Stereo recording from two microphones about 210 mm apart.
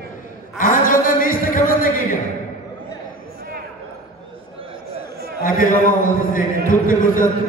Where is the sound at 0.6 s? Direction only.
40° left (ahead or behind).